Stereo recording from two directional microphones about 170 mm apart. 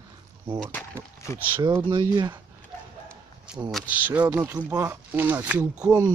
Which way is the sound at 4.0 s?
10° right (ahead or behind).